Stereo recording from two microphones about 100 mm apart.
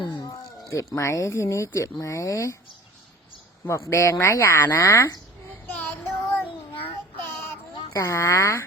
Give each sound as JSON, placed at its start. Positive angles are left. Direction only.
{"t": 0.0, "sound": "a sound", "side_deg": 50}
{"t": 0.3, "sound": "a sound", "side_deg": 30}
{"t": 0.9, "sound": "speech", "side_deg": 30}
{"t": 3.7, "sound": "speech", "side_deg": 30}
{"t": 5.6, "sound": "child singing", "side_deg": 20}
{"t": 7.9, "sound": "speech", "side_deg": 30}